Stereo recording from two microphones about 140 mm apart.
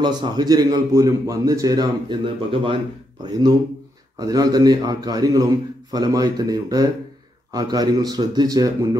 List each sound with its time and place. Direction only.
0.0 s a man's voice: 30° right (ahead or behind)
3.3 s a man's voice: 25° right (ahead or behind)